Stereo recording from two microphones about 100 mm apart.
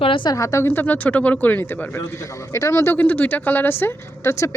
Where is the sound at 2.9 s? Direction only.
15° left (ahead or behind).